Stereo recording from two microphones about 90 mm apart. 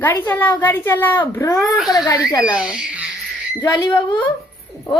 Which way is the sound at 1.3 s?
40° left (ahead or behind).